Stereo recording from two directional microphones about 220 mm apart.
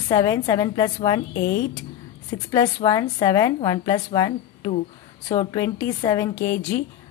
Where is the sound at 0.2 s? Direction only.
15° left (ahead or behind).